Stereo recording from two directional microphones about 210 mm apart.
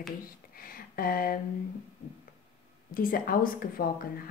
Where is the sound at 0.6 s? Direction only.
45° left (ahead or behind).